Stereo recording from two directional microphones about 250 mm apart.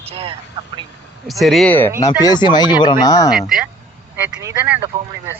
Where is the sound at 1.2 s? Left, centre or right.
Centre.